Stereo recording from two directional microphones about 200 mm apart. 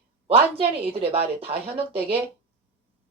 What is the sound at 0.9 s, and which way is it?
Speech, 30° right (ahead or behind).